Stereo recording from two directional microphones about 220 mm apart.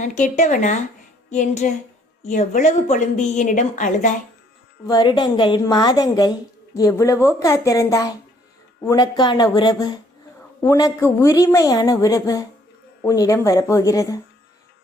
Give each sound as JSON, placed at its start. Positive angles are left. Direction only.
{"t": 0.0, "sound": "speech", "side_deg": 35}
{"t": 4.9, "sound": "a woman's voice", "side_deg": 20}